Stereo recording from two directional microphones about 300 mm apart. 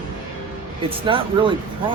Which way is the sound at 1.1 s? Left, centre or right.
Centre.